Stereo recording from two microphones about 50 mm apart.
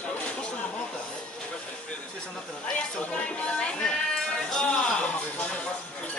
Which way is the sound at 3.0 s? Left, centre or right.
Left.